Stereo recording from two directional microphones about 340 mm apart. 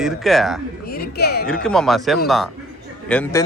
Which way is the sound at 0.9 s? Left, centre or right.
Left.